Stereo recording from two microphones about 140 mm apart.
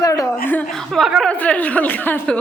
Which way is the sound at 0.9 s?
Centre (ahead or behind).